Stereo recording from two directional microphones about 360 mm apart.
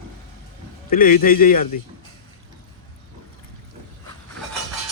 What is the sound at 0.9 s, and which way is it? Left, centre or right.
Speech, left.